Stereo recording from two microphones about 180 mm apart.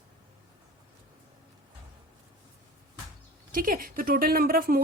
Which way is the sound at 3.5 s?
50° right (ahead or behind).